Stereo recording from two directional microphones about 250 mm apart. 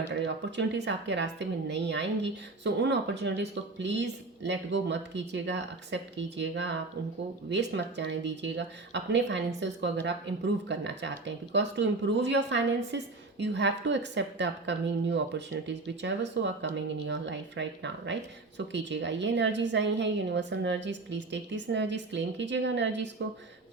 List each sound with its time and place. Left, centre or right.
0.5 s a woman's voice: right